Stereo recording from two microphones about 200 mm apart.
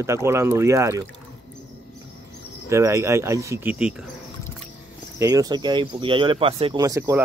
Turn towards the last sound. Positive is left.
turn(degrees=-15)  # may be behind; listen again after turning